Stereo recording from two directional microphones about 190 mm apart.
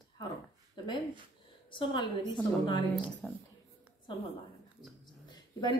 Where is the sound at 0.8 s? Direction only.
25° left (ahead or behind).